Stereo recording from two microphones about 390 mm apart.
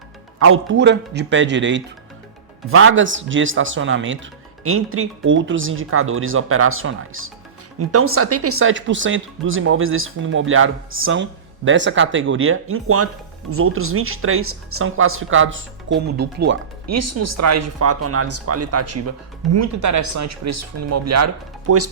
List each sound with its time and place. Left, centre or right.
0.3 s speech: right
16.8 s speech: right